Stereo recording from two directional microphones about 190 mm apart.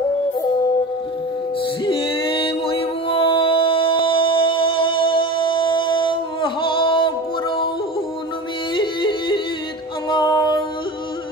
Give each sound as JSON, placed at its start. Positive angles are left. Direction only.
{"t": 1.6, "sound": "music", "side_deg": 25}
{"t": 8.7, "sound": "yodeling", "side_deg": 25}
{"t": 10.0, "sound": "music", "side_deg": 25}